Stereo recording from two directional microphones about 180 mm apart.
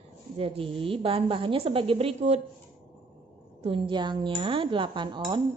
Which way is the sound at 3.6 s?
30° right (ahead or behind).